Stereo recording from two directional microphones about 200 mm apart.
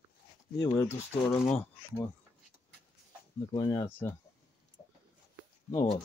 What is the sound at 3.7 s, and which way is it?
Speech, 15° left (ahead or behind).